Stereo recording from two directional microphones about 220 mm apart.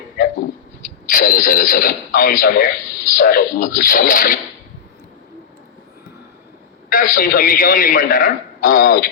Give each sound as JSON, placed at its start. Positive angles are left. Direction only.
{"t": 1.0, "sound": "speech", "side_deg": 40}
{"t": 6.9, "sound": "speech", "side_deg": 40}